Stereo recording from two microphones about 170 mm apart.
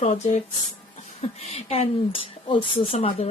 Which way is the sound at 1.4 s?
40° left (ahead or behind).